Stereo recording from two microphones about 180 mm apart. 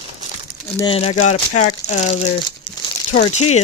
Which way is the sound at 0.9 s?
35° left (ahead or behind).